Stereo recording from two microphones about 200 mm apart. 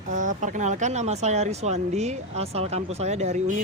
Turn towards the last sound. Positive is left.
turn(degrees=-35)  # may be behind; listen again after turning